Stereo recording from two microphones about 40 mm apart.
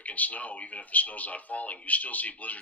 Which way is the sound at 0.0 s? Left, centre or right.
Left.